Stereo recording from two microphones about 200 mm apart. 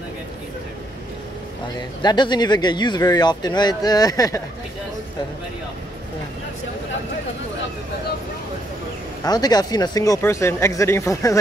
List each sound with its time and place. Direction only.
2.0 s speech: 20° left (ahead or behind)
9.2 s speech: 20° left (ahead or behind)